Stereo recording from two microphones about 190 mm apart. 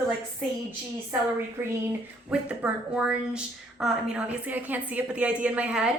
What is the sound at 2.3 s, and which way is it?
A woman's voice, 5° right (ahead or behind).